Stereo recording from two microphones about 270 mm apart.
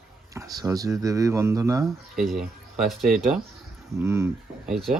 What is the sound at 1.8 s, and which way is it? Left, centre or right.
Speech, centre.